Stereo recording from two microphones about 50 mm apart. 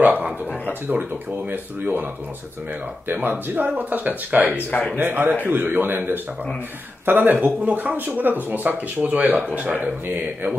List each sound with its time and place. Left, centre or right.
0.0 s a sound: right
0.7 s speech: right
3.1 s a man's voice: right